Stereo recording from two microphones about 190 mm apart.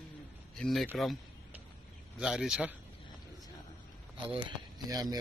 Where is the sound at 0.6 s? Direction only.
Centre (ahead or behind).